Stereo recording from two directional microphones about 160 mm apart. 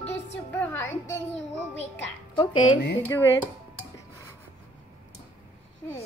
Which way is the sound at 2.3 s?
30° left (ahead or behind).